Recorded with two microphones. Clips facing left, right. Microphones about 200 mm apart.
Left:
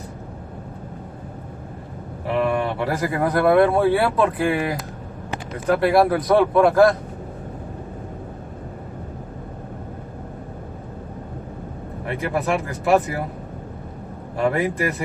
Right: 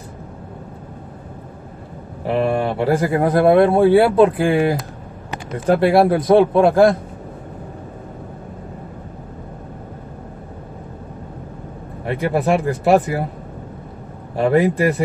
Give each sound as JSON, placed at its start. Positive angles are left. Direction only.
{"t": 2.2, "sound": "speech", "side_deg": -30}
{"t": 12.2, "sound": "speech", "side_deg": -30}
{"t": 14.3, "sound": "speech", "side_deg": -30}